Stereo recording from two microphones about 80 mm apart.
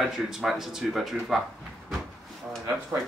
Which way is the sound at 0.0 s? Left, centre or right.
Centre.